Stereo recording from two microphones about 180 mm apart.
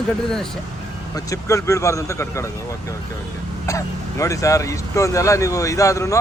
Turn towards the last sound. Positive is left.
turn(degrees=15)  # may be behind; listen again after turning